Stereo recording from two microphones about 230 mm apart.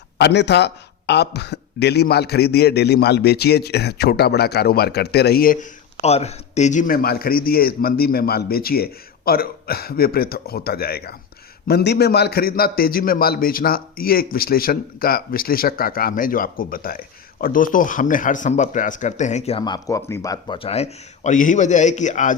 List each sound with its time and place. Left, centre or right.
0.2 s a man's voice: left